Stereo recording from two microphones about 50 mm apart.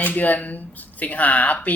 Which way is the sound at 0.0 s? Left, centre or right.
Left.